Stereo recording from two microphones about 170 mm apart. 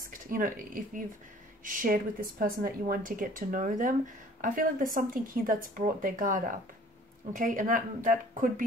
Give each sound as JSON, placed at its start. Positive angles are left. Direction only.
{"t": 0.0, "sound": "a woman's voice", "side_deg": -55}